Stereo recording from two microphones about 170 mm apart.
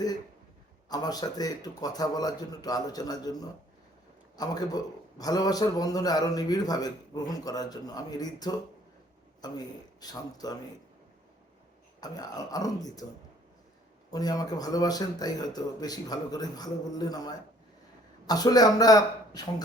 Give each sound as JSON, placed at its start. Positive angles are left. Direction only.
{"t": 0.9, "sound": "a man's voice", "side_deg": 20}
{"t": 11.9, "sound": "a man's voice", "side_deg": 20}
{"t": 14.1, "sound": "a man's voice", "side_deg": 20}